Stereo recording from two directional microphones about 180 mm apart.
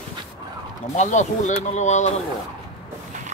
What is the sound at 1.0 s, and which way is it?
Speech, 40° left (ahead or behind).